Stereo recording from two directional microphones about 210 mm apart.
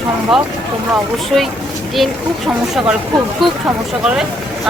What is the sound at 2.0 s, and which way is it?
Speech, centre (ahead or behind).